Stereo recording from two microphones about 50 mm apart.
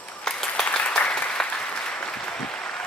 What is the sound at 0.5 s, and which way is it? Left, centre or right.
Applause, left.